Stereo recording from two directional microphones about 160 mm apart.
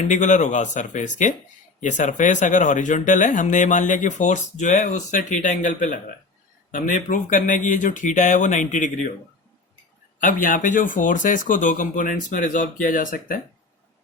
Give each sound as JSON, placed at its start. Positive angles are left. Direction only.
{"t": 0.0, "sound": "speech", "side_deg": 50}
{"t": 10.2, "sound": "speech", "side_deg": 55}